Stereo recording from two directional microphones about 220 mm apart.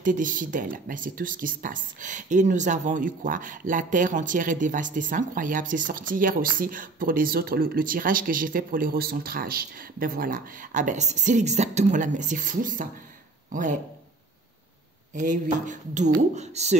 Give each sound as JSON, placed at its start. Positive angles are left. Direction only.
{"t": 0.0, "sound": "speech", "side_deg": -35}
{"t": 15.1, "sound": "speech", "side_deg": -35}